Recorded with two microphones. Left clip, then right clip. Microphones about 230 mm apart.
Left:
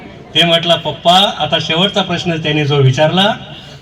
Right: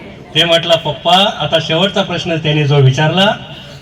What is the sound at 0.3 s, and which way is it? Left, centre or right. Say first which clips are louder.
A man's voice: even; left.